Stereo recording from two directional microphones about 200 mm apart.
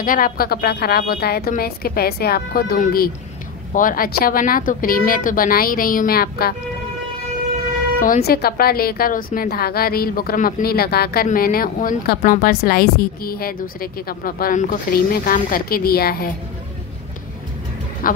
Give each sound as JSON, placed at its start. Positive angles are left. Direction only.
{"t": 0.0, "sound": "a woman's voice", "side_deg": 45}
{"t": 8.0, "sound": "a woman's voice", "side_deg": 45}
{"t": 18.0, "sound": "speech", "side_deg": 45}